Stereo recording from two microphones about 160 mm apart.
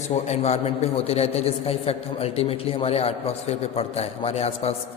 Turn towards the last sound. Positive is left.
turn(degrees=40)  # may be behind; listen again after turning